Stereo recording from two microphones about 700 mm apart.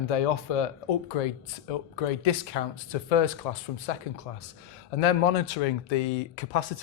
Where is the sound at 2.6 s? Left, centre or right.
Left.